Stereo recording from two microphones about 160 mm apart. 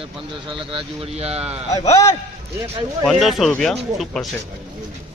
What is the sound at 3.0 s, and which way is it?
Speech, centre (ahead or behind).